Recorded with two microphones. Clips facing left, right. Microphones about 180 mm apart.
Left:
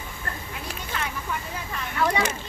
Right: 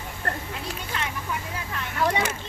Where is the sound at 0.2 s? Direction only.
65° right (ahead or behind).